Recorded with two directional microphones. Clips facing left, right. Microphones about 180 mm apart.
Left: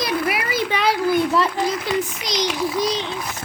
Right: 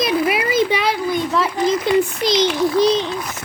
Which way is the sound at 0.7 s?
Centre (ahead or behind).